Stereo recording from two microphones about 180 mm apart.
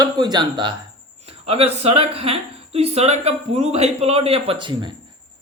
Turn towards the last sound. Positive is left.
turn(degrees=-25)  # may be behind; listen again after turning